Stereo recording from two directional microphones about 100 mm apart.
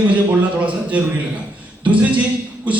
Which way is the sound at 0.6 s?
15° right (ahead or behind).